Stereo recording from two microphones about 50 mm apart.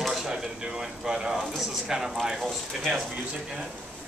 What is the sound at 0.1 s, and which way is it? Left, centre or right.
Speech, centre.